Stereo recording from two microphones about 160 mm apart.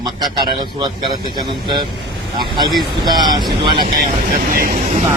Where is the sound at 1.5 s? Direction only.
25° right (ahead or behind).